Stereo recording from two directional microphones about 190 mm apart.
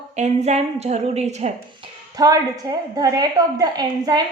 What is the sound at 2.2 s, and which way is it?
A woman's voice, 20° right (ahead or behind).